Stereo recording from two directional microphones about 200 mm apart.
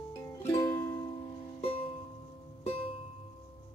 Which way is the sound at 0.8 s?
25° left (ahead or behind).